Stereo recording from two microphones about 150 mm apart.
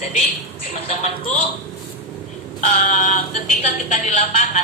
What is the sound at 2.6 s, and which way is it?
Speech, 60° left (ahead or behind).